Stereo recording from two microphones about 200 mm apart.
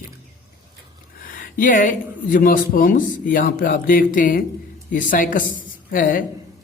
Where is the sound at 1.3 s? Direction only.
45° left (ahead or behind).